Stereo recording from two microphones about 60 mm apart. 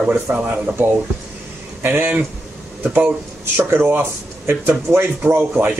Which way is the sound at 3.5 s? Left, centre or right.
Right.